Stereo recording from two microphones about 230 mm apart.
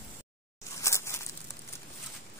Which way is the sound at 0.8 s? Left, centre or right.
Centre.